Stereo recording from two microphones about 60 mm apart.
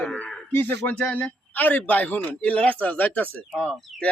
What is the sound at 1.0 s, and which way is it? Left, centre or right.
A man's voice, centre.